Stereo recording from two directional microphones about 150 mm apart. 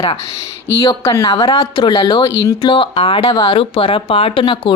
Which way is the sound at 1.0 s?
20° left (ahead or behind).